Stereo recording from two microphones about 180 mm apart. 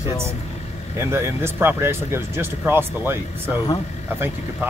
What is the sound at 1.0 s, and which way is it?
Speech, 15° right (ahead or behind).